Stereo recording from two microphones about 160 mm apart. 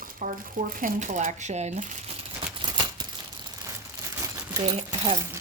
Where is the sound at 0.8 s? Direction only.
50° right (ahead or behind).